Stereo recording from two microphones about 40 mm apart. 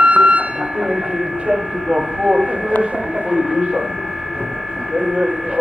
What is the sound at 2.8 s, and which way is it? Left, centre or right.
Speech, right.